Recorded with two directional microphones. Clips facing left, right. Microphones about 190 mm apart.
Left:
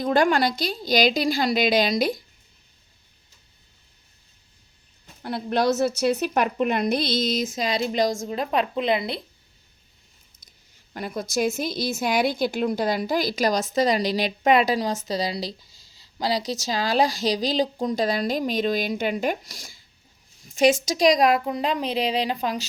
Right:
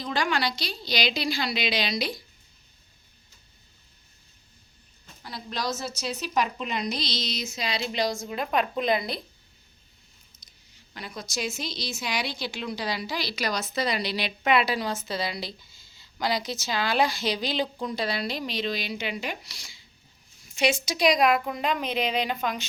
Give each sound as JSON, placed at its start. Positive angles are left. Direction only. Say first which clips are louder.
{"t": 0.0, "sound": "a woman's voice", "louder": "left 8 dB", "side_deg": 50}
{"t": 5.2, "sound": "a woman's voice", "louder": "left 10 dB", "side_deg": 60}
{"t": 8.3, "sound": "a woman's voice", "louder": "left 3 dB", "side_deg": 35}
{"t": 10.9, "sound": "a woman's voice", "louder": "left 9 dB", "side_deg": 50}